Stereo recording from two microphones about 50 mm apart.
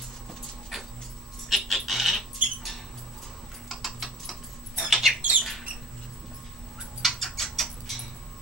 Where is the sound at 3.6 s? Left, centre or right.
Centre.